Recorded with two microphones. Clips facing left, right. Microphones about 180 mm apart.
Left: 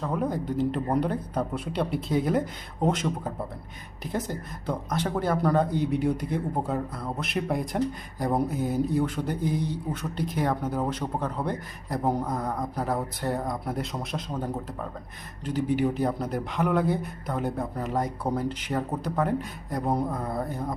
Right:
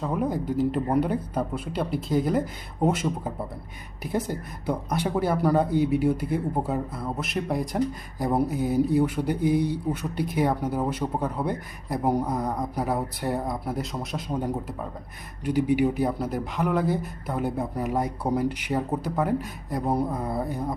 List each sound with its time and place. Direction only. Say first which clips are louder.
0.0 s speech: right 2 dB; 5° right (ahead or behind)
14.3 s speech: right 3 dB; 15° right (ahead or behind)